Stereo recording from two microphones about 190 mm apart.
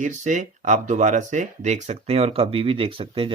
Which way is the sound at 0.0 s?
40° right (ahead or behind).